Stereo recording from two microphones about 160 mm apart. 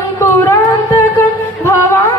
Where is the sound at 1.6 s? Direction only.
20° left (ahead or behind).